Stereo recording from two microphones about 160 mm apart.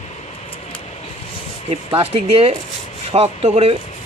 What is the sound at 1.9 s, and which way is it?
Speech, 40° right (ahead or behind).